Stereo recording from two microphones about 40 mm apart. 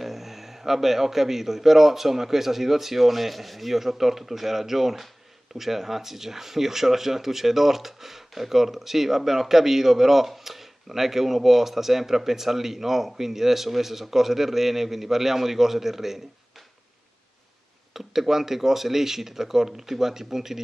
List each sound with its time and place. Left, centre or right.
0.0 s speech: centre
17.9 s speech: centre